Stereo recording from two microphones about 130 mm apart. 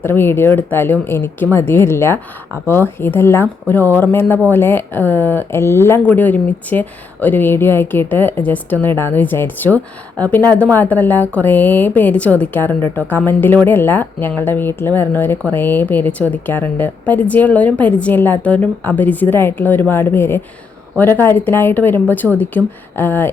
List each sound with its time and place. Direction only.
0.0 s a woman's voice: 20° left (ahead or behind)